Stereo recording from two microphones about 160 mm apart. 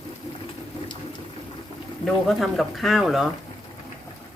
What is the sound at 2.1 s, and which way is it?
Speech, centre (ahead or behind).